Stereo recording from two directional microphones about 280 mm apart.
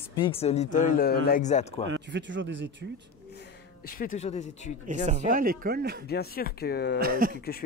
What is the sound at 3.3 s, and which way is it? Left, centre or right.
Speech, left.